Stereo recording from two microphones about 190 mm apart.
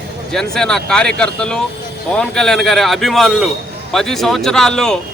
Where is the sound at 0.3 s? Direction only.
5° left (ahead or behind).